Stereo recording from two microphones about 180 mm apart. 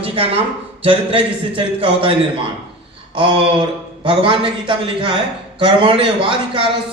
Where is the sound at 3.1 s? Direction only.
30° right (ahead or behind).